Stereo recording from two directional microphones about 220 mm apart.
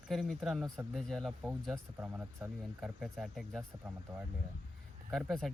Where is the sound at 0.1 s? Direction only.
Centre (ahead or behind).